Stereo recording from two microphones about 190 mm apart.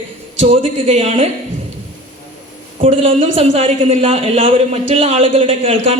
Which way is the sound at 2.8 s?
30° right (ahead or behind).